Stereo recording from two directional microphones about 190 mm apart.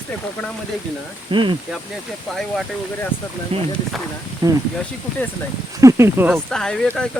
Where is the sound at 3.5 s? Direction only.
30° right (ahead or behind).